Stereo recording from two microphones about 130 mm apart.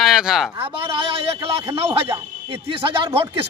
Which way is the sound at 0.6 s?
45° right (ahead or behind).